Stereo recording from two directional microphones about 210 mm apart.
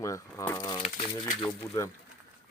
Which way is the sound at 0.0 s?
15° left (ahead or behind).